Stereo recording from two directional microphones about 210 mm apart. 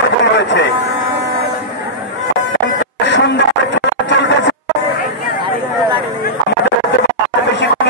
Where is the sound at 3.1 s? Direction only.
55° left (ahead or behind).